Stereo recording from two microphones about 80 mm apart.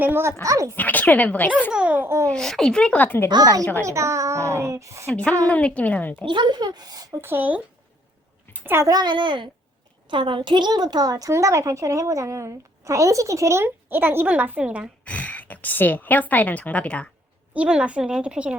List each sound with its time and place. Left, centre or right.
0.0 s speech: right
0.4 s speech: right
0.8 s speech: centre
1.7 s a child's voice: centre
2.0 s a woman's voice: right
2.3 s speech: centre; by 3.2 s left
3.8 s a woman's voice: right
5.0 s speech: centre
6.2 s speech: right
7.1 s a child's voice: right
8.9 s a woman's voice: right; by 14.8 s centre
15.0 s a woman's voice: centre
17.5 s a woman's voice: centre